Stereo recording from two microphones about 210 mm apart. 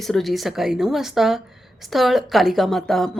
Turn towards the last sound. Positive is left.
turn(degrees=0)  # may be behind; listen again after turning